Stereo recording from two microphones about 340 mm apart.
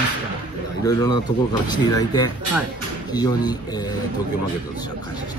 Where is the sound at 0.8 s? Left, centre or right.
Centre.